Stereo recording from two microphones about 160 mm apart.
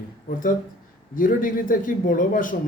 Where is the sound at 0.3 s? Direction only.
55° left (ahead or behind).